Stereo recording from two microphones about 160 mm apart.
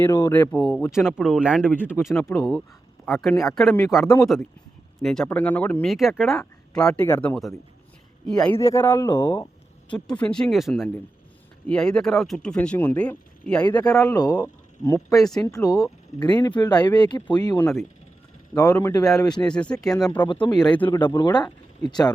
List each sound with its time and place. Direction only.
0.0 s speech: 15° left (ahead or behind)
0.9 s speech: 5° right (ahead or behind)
1.6 s speech: 10° left (ahead or behind)
8.5 s speech: 15° left (ahead or behind)
9.9 s speech: 5° left (ahead or behind)
13.7 s speech: 20° left (ahead or behind); by 20.1 s 5° left (ahead or behind)
20.2 s speech: 30° left (ahead or behind)
20.7 s speech: 10° left (ahead or behind)
20.9 s speech: 20° left (ahead or behind)